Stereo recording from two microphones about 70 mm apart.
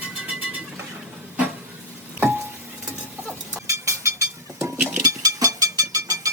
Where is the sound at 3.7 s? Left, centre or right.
Right.